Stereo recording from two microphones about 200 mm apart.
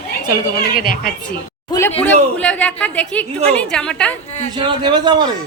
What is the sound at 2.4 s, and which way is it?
A woman's voice, 5° left (ahead or behind).